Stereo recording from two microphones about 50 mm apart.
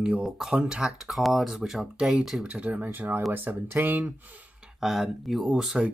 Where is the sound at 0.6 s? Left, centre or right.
Centre.